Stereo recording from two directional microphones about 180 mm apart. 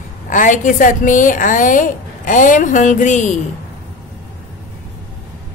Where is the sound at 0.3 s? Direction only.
45° left (ahead or behind).